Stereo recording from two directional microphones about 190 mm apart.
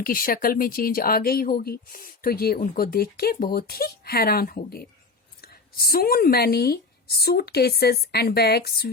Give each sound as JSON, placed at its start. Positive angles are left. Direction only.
{"t": 0.0, "sound": "speech", "side_deg": 50}